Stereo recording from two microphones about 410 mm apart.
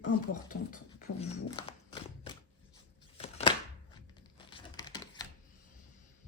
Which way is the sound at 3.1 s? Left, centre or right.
Centre.